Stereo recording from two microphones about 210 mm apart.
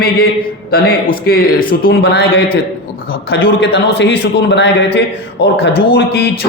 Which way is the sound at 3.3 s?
55° left (ahead or behind).